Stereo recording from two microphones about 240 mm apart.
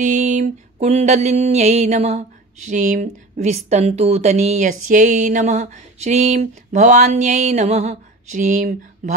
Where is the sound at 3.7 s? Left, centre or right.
Right.